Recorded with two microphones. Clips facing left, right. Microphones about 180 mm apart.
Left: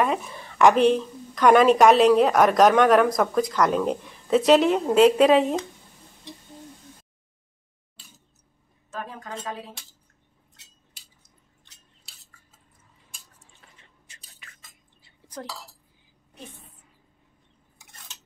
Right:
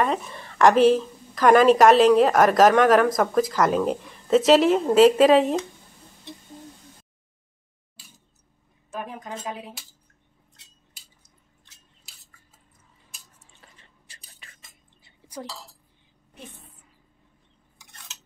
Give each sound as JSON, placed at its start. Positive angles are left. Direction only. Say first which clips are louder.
{"t": 0.0, "sound": "a woman's voice", "louder": "even", "side_deg": 0}
{"t": 8.9, "sound": "a woman's voice", "louder": "right 1 dB", "side_deg": -20}
{"t": 14.0, "sound": "a sound", "louder": "even", "side_deg": -35}